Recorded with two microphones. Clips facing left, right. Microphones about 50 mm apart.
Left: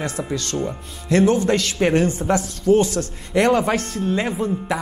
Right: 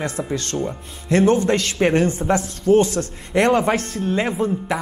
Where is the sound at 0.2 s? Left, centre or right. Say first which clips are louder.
Left 1 dB; right.